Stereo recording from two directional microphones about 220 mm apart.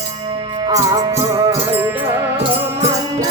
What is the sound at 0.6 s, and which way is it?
Music, 15° right (ahead or behind).